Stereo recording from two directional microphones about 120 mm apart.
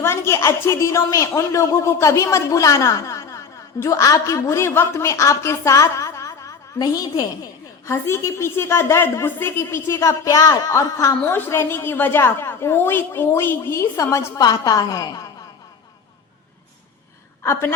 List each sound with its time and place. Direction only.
0.0 s a woman's voice: 20° left (ahead or behind)
11.3 s a woman's voice: 15° left (ahead or behind); by 15.2 s 35° left (ahead or behind)
17.4 s a woman's voice: 20° left (ahead or behind)